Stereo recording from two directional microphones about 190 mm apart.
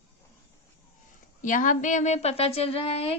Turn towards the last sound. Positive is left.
turn(degrees=30)  # may be behind; listen again after turning